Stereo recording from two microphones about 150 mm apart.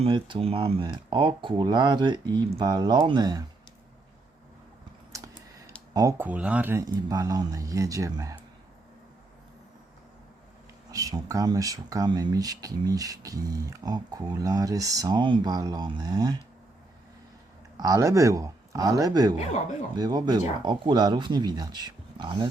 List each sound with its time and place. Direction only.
0.0 s speech: 35° right (ahead or behind)
5.1 s computer keyboard: 20° right (ahead or behind)
6.1 s speech: 10° right (ahead or behind)
6.8 s speech: 25° right (ahead or behind)
10.9 s speech: 20° right (ahead or behind)
17.7 s speech: 20° right (ahead or behind)